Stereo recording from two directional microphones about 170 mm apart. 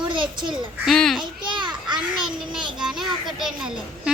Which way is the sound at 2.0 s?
5° right (ahead or behind).